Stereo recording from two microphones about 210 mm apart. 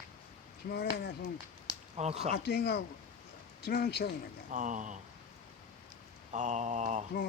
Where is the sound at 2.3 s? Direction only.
50° left (ahead or behind).